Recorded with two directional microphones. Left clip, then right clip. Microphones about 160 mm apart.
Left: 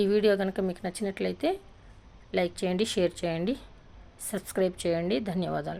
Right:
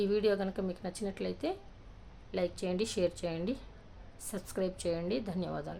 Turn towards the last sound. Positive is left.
turn(degrees=40)  # may be behind; listen again after turning